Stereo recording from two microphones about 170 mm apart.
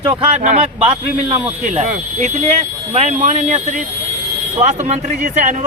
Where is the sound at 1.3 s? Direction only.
45° right (ahead or behind).